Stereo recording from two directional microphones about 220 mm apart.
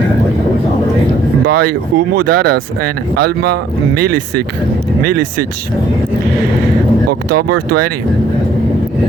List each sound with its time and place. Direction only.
1.5 s speech: 45° right (ahead or behind)
7.3 s speech: 90° right